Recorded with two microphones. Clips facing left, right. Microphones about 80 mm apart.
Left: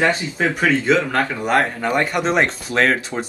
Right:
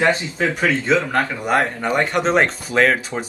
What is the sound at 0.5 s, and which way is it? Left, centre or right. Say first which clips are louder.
Speech: left 2 dB; centre.